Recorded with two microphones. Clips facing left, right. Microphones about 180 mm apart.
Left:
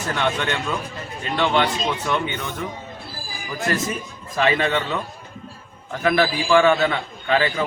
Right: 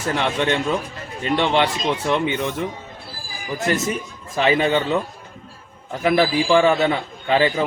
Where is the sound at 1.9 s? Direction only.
30° right (ahead or behind).